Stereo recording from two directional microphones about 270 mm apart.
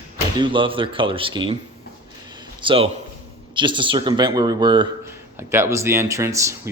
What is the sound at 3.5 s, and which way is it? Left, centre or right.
Speech, centre.